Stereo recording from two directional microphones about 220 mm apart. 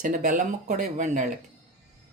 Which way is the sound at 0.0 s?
35° right (ahead or behind).